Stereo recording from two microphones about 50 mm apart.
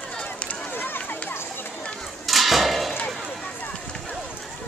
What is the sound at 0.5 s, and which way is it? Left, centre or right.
Run, left.